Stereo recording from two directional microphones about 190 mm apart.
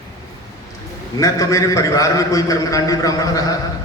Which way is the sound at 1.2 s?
20° left (ahead or behind).